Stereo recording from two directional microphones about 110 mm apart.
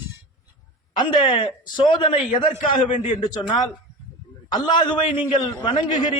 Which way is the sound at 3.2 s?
45° left (ahead or behind).